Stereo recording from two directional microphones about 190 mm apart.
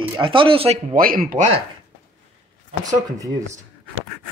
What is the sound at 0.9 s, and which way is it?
Speech, 50° right (ahead or behind).